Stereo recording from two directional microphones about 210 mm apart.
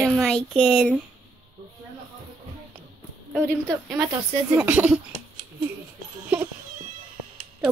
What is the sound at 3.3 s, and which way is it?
A woman's voice, 5° left (ahead or behind).